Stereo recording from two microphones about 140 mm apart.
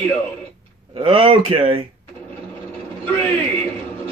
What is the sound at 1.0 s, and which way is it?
Speech, 40° right (ahead or behind).